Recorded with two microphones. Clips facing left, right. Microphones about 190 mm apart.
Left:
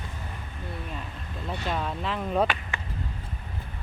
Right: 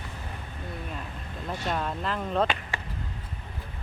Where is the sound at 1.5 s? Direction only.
Centre (ahead or behind).